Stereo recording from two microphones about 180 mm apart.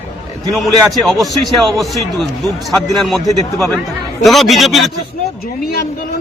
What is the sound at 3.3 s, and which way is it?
Speech, 20° right (ahead or behind).